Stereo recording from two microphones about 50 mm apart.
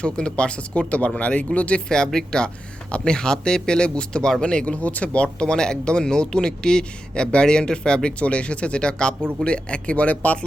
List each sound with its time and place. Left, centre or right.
0.0 s speech: left
2.0 s speech: centre